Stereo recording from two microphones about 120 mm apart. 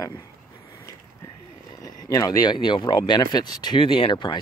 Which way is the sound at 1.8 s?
30° left (ahead or behind).